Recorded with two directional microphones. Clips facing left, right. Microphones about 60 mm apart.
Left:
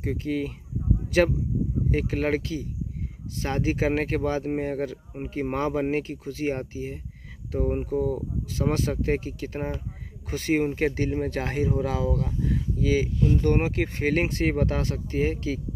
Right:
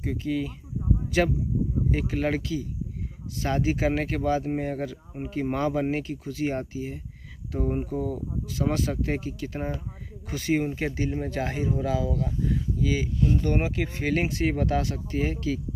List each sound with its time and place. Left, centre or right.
0.0 s speech: left
1.9 s speech: left; by 8.2 s centre
8.5 s speech: left